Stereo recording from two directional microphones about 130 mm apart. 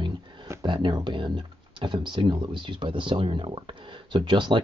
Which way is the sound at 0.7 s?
35° right (ahead or behind).